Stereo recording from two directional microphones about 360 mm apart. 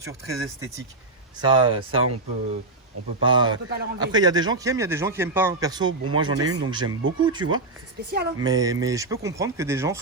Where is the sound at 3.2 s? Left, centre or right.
Centre.